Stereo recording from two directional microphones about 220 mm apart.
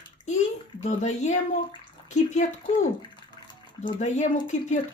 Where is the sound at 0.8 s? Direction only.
30° left (ahead or behind).